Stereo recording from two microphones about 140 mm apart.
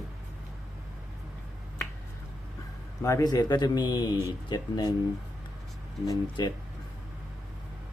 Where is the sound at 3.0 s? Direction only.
25° left (ahead or behind).